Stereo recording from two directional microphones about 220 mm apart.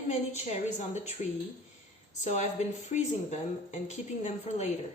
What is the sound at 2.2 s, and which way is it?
A woman's voice, 30° left (ahead or behind).